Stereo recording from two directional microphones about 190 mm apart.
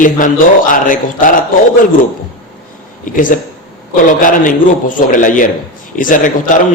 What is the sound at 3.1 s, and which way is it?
A man's voice, 45° left (ahead or behind).